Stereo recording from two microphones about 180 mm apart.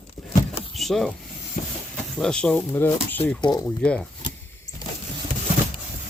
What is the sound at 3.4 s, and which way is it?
Speech, 25° left (ahead or behind).